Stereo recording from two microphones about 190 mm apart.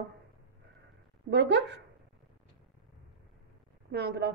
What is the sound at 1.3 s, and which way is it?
Speech, 65° right (ahead or behind).